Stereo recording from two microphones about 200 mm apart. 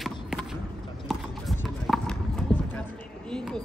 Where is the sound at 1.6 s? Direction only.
5° left (ahead or behind).